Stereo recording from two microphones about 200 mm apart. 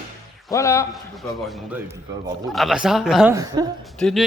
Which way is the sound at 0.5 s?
15° left (ahead or behind).